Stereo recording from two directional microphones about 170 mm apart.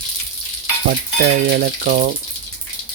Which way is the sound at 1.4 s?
65° right (ahead or behind).